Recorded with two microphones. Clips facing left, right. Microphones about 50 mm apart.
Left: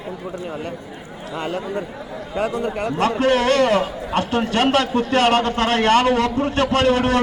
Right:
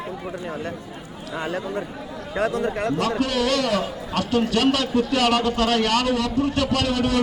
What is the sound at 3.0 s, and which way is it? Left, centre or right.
A man's voice, left.